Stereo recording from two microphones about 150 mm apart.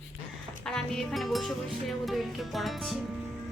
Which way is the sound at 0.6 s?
5° left (ahead or behind).